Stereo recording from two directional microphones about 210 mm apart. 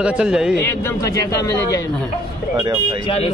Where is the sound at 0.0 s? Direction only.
5° right (ahead or behind).